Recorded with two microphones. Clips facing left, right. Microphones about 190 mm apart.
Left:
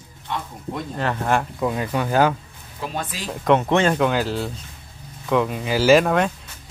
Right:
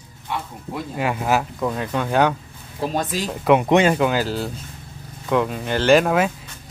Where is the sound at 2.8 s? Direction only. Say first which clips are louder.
Right 6 dB; 40° right (ahead or behind).